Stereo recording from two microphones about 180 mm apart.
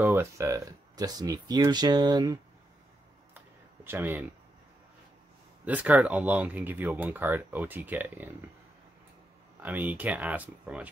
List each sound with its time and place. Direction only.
0.0 s speech: 15° right (ahead or behind)
3.3 s a sound: 10° right (ahead or behind)
5.7 s speech: 10° right (ahead or behind)
9.6 s speech: 10° right (ahead or behind)